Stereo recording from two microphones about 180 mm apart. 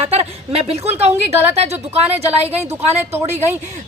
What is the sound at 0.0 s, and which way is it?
A woman's voice, 35° right (ahead or behind).